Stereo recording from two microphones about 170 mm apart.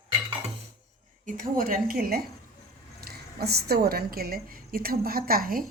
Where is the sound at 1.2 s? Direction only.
50° right (ahead or behind).